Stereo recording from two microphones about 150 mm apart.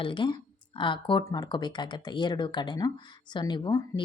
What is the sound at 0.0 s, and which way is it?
Speech, 35° left (ahead or behind).